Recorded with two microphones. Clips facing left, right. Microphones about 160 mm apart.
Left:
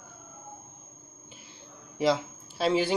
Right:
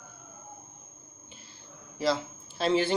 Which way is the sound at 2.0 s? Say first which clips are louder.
Left 3 dB; 10° left (ahead or behind).